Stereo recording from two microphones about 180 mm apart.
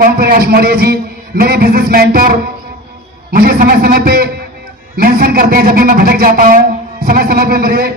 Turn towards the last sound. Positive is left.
turn(degrees=-55)  # may be behind; listen again after turning